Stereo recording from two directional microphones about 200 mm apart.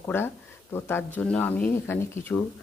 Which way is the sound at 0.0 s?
10° left (ahead or behind).